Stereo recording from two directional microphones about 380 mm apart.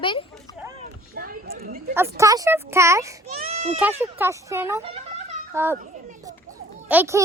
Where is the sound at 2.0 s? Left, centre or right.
Centre.